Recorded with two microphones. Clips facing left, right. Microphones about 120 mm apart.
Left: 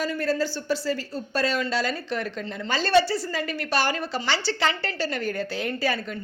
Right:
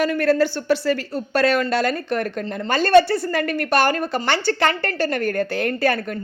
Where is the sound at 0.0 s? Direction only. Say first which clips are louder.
Right 7 dB; 65° right (ahead or behind).